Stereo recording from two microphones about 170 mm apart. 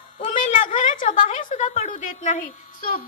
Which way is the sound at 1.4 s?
45° left (ahead or behind).